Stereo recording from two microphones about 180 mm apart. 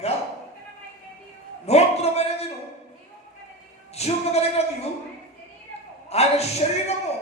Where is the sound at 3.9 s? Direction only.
35° left (ahead or behind).